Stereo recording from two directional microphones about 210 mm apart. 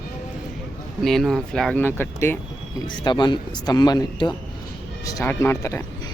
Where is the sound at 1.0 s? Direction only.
Centre (ahead or behind).